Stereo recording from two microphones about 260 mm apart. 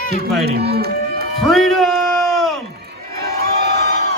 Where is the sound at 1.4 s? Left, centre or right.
Centre.